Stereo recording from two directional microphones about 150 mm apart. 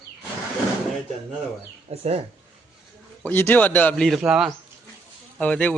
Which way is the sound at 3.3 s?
10° left (ahead or behind).